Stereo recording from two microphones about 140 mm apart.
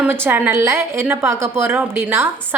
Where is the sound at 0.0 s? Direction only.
15° right (ahead or behind).